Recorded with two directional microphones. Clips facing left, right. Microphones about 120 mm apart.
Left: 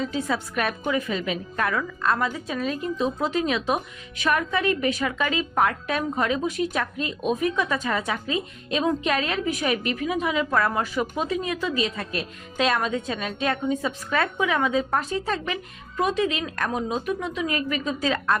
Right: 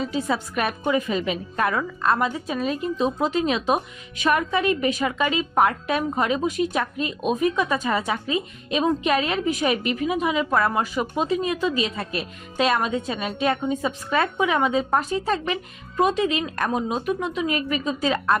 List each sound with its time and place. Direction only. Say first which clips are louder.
0.0 s a woman's voice: right 2 dB; 15° right (ahead or behind)
12.1 s a woman's voice: right 2 dB; 10° right (ahead or behind)